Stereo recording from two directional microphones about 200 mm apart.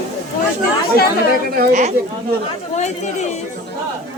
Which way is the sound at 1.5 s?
50° right (ahead or behind).